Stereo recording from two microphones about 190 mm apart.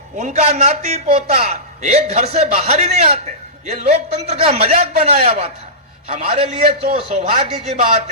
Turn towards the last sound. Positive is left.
turn(degrees=-30)  # may be behind; listen again after turning